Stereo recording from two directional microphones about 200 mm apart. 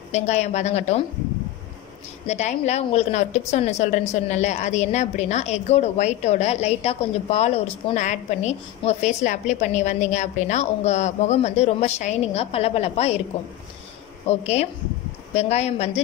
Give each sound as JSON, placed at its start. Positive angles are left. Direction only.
{"t": 0.1, "sound": "a woman's voice", "side_deg": 35}
{"t": 2.2, "sound": "a woman's voice", "side_deg": 35}
{"t": 14.3, "sound": "a woman's voice", "side_deg": 35}